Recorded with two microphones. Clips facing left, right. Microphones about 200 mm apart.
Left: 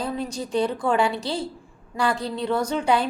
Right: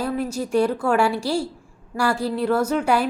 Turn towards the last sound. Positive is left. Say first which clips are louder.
# right 2 dB
turn(degrees=-10)  # may be behind; listen again after turning